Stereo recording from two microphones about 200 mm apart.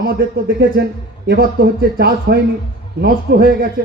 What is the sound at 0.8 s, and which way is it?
A man's voice, 55° right (ahead or behind).